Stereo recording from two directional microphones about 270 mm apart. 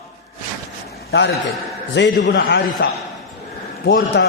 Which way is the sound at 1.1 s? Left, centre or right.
Left.